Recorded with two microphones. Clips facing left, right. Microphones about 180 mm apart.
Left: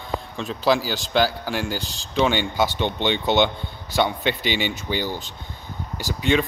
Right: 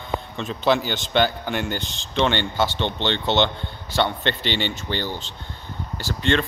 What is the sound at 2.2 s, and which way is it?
Speech, 10° left (ahead or behind).